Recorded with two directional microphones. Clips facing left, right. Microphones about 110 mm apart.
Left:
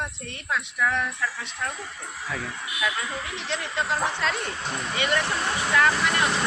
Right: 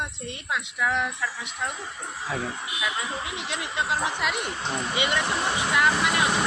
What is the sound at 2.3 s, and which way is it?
Speech, 30° right (ahead or behind).